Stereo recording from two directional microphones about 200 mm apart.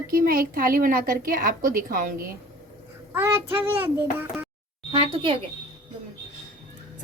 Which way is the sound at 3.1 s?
10° right (ahead or behind).